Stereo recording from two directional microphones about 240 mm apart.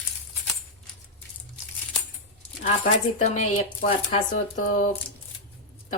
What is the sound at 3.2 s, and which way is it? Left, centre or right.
Speech, left.